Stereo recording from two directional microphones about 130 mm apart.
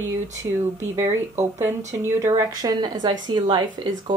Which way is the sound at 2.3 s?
30° right (ahead or behind).